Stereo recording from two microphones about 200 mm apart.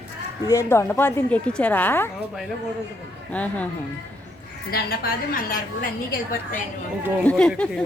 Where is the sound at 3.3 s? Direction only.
5° left (ahead or behind).